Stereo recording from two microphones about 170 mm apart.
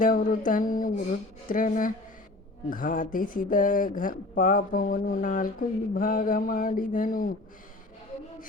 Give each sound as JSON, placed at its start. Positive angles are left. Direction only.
{"t": 0.0, "sound": "speech", "side_deg": 50}